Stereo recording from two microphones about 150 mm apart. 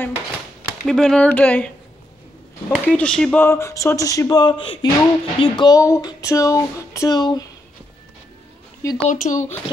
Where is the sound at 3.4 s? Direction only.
20° left (ahead or behind).